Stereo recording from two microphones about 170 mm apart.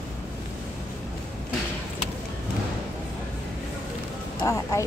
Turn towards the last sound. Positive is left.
turn(degrees=20)  # may be behind; listen again after turning